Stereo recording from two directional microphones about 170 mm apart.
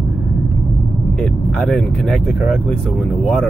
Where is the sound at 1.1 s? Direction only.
Centre (ahead or behind).